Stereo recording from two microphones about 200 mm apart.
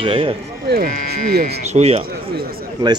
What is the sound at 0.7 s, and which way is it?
Speech, 50° right (ahead or behind).